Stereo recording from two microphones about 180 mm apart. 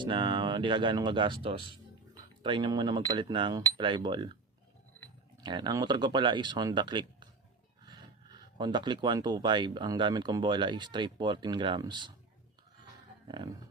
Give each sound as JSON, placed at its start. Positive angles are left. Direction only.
{"t": 0.0, "sound": "speech", "side_deg": -25}
{"t": 5.4, "sound": "speech", "side_deg": -25}
{"t": 7.9, "sound": "a sound", "side_deg": -25}
{"t": 8.5, "sound": "speech", "side_deg": -25}
{"t": 13.2, "sound": "speech", "side_deg": -25}